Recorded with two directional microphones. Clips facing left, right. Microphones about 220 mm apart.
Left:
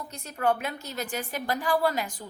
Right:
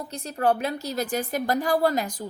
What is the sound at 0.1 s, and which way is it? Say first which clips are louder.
A woman's voice: right 3 dB; 35° right (ahead or behind).